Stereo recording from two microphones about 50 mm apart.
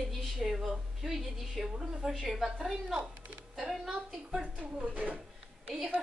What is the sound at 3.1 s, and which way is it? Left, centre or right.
Music, right.